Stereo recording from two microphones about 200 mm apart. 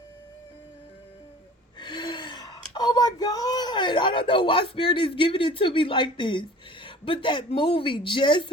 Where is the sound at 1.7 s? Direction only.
25° left (ahead or behind).